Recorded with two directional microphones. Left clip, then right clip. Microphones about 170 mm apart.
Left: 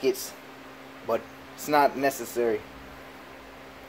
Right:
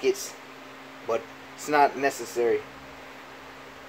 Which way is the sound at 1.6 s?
35° left (ahead or behind).